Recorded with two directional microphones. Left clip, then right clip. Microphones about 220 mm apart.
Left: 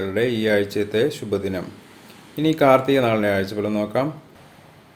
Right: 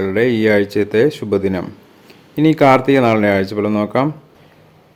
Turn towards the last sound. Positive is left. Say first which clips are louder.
# right 6 dB
turn(degrees=-45)  # may be behind; listen again after turning